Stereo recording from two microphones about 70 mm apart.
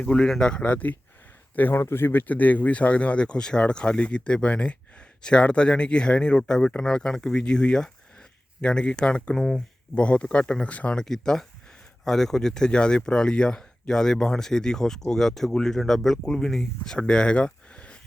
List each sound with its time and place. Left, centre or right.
0.0 s speech: centre
9.4 s speech: centre
9.9 s speech: centre
11.0 s speech: centre